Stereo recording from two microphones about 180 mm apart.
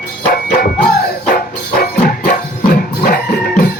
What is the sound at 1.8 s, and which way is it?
Music, 55° left (ahead or behind).